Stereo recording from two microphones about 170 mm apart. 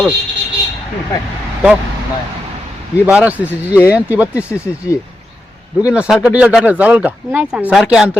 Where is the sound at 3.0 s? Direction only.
5° right (ahead or behind).